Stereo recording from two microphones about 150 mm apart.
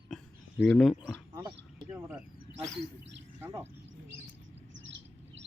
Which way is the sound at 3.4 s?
15° right (ahead or behind).